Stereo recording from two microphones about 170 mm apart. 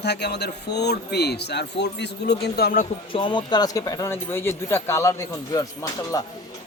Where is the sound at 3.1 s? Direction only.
30° left (ahead or behind).